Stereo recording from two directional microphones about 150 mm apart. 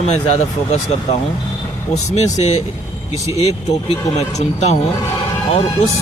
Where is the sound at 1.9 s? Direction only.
50° left (ahead or behind).